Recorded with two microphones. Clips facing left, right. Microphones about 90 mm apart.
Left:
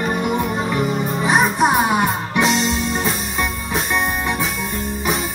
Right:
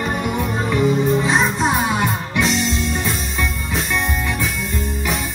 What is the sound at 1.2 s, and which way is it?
Music, 15° left (ahead or behind).